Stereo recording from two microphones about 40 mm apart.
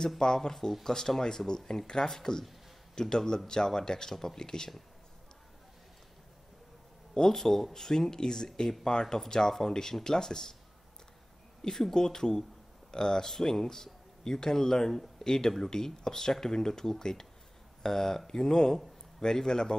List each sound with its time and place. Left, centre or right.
0.2 s speech: centre
7.2 s speech: centre
11.7 s speech: centre